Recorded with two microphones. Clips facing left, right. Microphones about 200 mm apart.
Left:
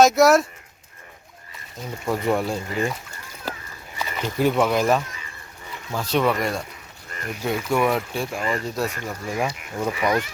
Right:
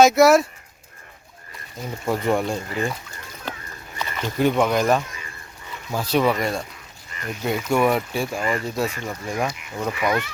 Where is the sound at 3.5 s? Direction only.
5° left (ahead or behind).